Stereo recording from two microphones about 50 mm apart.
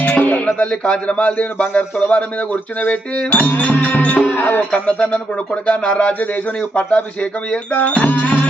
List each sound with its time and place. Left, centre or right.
0.0 s music: left
0.9 s speech: left
4.7 s speech: left
6.1 s speech: left